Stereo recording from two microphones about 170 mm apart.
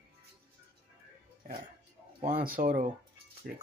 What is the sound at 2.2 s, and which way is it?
Speech, 55° right (ahead or behind).